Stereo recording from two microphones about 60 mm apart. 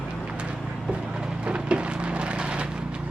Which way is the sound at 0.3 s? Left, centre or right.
Centre.